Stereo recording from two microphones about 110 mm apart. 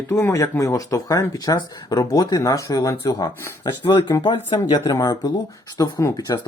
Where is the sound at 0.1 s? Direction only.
25° left (ahead or behind).